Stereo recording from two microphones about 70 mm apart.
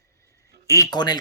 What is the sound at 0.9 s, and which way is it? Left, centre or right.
Speech, left.